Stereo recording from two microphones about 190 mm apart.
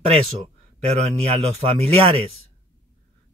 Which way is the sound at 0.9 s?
30° right (ahead or behind).